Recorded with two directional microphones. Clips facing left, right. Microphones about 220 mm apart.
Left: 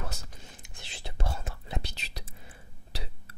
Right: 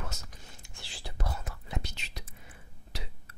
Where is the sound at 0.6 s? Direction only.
20° left (ahead or behind).